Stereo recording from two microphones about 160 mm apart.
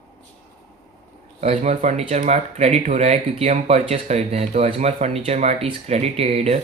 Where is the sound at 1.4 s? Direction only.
45° right (ahead or behind).